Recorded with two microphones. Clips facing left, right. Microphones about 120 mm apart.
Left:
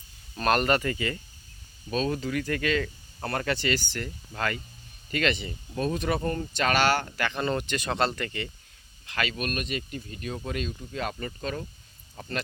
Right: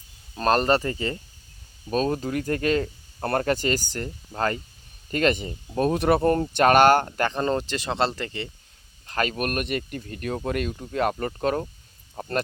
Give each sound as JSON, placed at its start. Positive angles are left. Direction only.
{"t": 0.3, "sound": "speech", "side_deg": -30}
{"t": 1.9, "sound": "speech", "side_deg": -40}
{"t": 5.9, "sound": "speech", "side_deg": -55}
{"t": 9.0, "sound": "speech", "side_deg": -40}